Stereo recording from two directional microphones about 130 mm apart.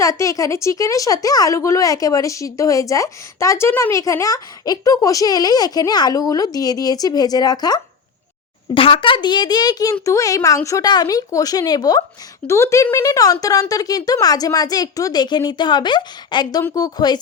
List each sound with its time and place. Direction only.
0.0 s speech: 25° left (ahead or behind)
8.7 s a child's voice: 40° left (ahead or behind)